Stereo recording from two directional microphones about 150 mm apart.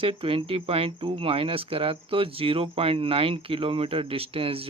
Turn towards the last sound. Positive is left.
turn(degrees=-40)  # may be behind; listen again after turning